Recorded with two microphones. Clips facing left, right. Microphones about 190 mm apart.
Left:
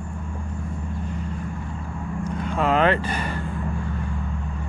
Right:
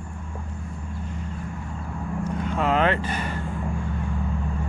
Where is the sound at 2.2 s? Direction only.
10° left (ahead or behind).